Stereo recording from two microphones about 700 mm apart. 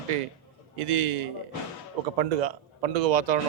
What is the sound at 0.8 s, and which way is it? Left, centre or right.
A man's voice, right.